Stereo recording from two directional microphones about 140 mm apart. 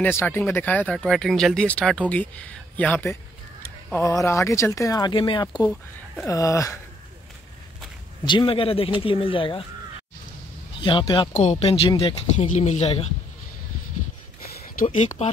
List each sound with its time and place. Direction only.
0.0 s speech: 15° left (ahead or behind)
4.0 s speech: 25° left (ahead or behind)
8.3 s speech: 35° left (ahead or behind)
10.8 s speech: 35° left (ahead or behind)
11.3 s speech: 50° left (ahead or behind)